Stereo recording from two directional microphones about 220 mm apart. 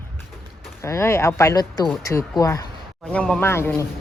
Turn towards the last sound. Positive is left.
turn(degrees=10)  # may be behind; listen again after turning